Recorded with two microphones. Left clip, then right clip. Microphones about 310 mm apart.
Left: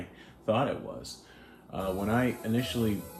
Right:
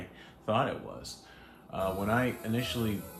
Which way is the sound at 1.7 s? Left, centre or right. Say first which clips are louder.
Even; right.